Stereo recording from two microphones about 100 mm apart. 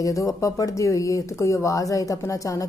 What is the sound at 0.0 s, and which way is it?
A woman's voice, 35° left (ahead or behind).